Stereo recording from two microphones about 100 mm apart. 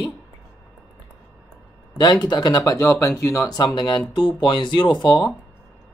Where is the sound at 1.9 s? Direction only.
45° left (ahead or behind).